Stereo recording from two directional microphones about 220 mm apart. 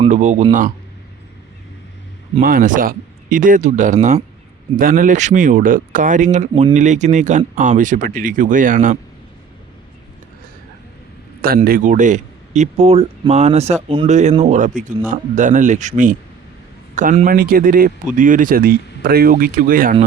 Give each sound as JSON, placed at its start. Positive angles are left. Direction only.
{"t": 0.0, "sound": "speech", "side_deg": -30}
{"t": 2.4, "sound": "a man's voice", "side_deg": -40}
{"t": 11.4, "sound": "a man's voice", "side_deg": -40}